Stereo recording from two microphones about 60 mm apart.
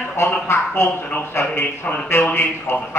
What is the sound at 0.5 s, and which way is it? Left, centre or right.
A man's voice, left.